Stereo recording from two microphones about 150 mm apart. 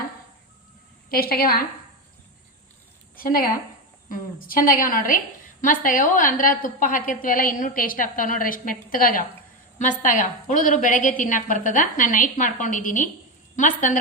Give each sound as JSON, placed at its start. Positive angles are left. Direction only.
{"t": 1.1, "sound": "a woman's voice", "side_deg": 85}
{"t": 3.2, "sound": "a woman's voice", "side_deg": 75}
{"t": 9.7, "sound": "a woman's voice", "side_deg": 55}